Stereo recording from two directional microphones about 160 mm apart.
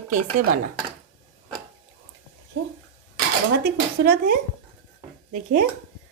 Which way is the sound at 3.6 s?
70° right (ahead or behind).